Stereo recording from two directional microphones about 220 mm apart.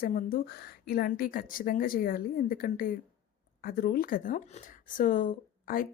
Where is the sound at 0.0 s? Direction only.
40° left (ahead or behind).